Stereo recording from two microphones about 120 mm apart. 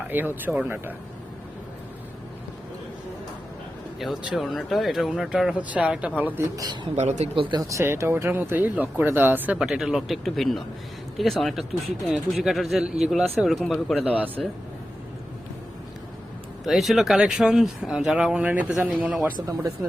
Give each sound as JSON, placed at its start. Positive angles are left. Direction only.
{"t": 0.1, "sound": "speech", "side_deg": -15}
{"t": 4.0, "sound": "speech", "side_deg": -5}
{"t": 6.9, "sound": "speech", "side_deg": -70}
{"t": 7.3, "sound": "speech", "side_deg": -45}
{"t": 7.7, "sound": "speech", "side_deg": -25}
{"t": 9.6, "sound": "speech", "side_deg": -5}
{"t": 16.6, "sound": "speech", "side_deg": 0}